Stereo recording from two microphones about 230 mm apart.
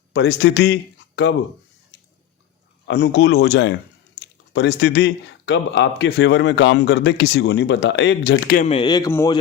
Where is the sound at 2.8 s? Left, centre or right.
Left.